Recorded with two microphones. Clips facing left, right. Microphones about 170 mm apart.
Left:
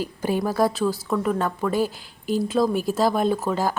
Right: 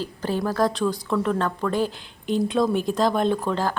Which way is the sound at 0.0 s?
10° left (ahead or behind).